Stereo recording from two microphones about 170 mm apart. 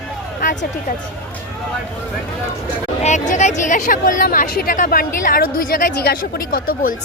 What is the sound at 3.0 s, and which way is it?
Speech, 45° left (ahead or behind).